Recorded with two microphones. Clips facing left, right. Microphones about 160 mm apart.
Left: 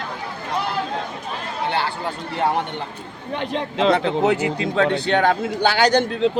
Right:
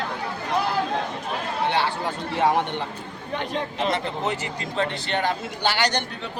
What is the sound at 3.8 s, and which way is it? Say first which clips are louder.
Speech: left 10 dB; 80° left.